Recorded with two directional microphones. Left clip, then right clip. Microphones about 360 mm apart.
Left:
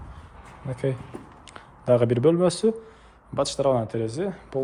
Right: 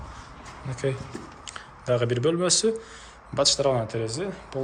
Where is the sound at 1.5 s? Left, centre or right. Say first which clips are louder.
Left 5 dB; centre.